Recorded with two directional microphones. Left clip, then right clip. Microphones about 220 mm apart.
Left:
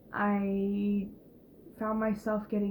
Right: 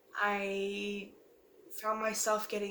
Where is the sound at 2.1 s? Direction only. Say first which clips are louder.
Even; 25° right (ahead or behind).